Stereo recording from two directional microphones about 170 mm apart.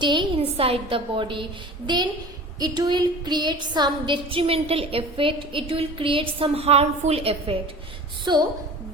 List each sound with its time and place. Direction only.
0.0 s a woman's voice: 30° right (ahead or behind)
2.6 s a sound: 25° right (ahead or behind)
8.3 s a woman's voice: 25° right (ahead or behind)